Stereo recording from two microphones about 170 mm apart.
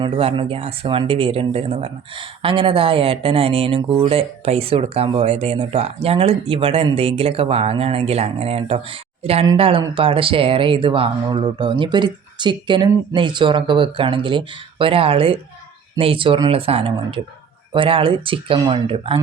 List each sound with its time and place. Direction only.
0.0 s speech: 30° right (ahead or behind)